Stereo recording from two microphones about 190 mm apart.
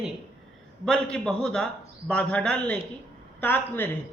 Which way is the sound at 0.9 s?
5° left (ahead or behind).